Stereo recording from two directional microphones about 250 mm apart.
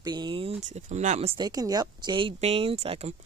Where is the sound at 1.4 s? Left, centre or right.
Centre.